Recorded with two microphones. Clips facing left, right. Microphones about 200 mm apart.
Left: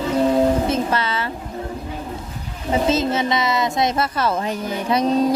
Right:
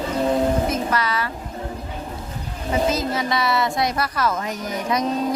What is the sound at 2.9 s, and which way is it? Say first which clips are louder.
Speech: left 3 dB; 25° left (ahead or behind).